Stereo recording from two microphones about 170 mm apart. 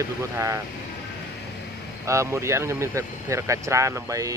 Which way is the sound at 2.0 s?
15° right (ahead or behind).